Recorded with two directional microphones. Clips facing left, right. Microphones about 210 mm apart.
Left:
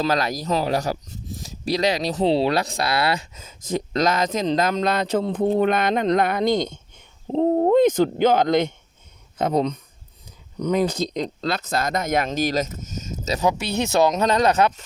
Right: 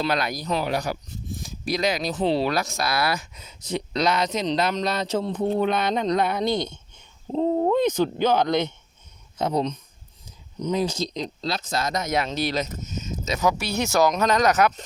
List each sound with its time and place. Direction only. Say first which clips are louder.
0.0 s speech: left 3 dB; 40° left (ahead or behind)
3.3 s speech: left 3 dB; 45° left (ahead or behind)
10.6 s speech: left 3 dB; 60° left (ahead or behind); by 13.4 s 40° left (ahead or behind)
13.4 s speech: left 1 dB; 25° left (ahead or behind)